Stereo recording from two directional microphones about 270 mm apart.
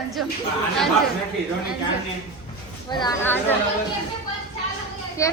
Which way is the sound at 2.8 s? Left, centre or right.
Centre.